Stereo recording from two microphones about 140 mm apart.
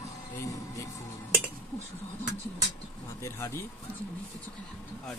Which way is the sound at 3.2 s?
20° left (ahead or behind).